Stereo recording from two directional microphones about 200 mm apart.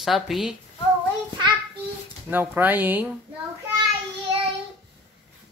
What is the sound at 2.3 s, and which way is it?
Speech, 10° right (ahead or behind).